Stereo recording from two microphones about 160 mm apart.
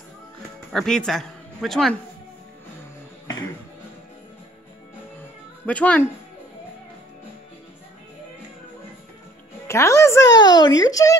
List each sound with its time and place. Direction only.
0.7 s speech: 5° left (ahead or behind)
5.7 s speech: 10° left (ahead or behind)
9.7 s speech: 15° left (ahead or behind)